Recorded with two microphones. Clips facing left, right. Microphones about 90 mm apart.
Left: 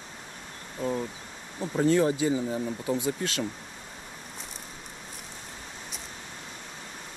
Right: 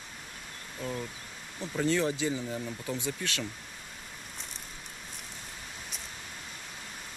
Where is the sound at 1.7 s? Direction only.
40° left (ahead or behind).